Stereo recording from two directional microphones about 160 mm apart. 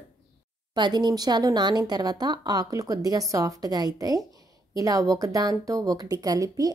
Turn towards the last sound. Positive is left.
turn(degrees=-25)  # may be behind; listen again after turning